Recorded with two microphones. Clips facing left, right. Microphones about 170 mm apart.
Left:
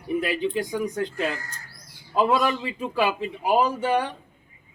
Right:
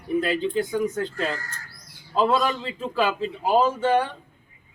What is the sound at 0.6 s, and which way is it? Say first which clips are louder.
A man's voice: right 2 dB; 15° left (ahead or behind).